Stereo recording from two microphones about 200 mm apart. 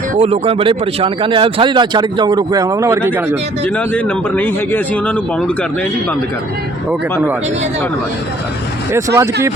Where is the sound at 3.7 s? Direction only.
10° left (ahead or behind).